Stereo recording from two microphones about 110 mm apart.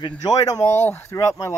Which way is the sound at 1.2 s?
30° left (ahead or behind).